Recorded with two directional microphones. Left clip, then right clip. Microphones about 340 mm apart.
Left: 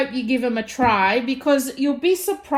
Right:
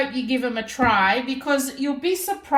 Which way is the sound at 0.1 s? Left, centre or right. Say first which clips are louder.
Left 2 dB; right.